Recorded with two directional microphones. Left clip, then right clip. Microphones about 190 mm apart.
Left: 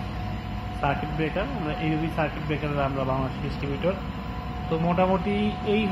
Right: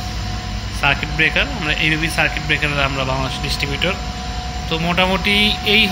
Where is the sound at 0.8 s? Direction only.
15° right (ahead or behind).